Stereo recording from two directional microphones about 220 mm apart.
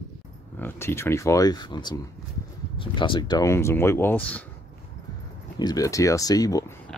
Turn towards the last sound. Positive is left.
turn(degrees=15)  # may be behind; listen again after turning